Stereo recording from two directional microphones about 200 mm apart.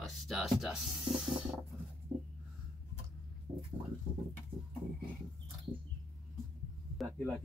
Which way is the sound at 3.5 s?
20° right (ahead or behind).